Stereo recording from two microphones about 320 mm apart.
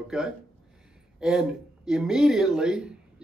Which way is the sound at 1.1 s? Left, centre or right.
Centre.